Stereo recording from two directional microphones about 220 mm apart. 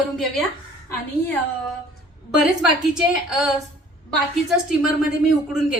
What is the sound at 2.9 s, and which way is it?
Speech, 5° right (ahead or behind).